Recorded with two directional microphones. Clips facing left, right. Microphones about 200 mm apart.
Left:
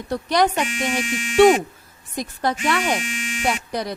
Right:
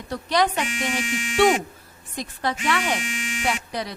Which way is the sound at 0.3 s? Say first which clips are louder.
Left 2 dB; 45° left (ahead or behind).